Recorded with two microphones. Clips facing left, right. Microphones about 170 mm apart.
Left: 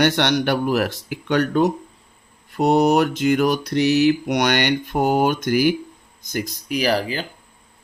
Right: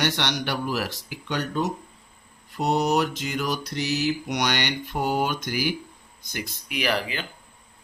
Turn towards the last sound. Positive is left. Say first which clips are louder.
# left 6 dB
turn(degrees=35)  # may be behind; listen again after turning